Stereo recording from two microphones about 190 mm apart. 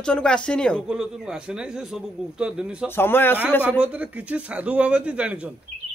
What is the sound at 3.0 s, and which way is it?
Speech, 10° left (ahead or behind).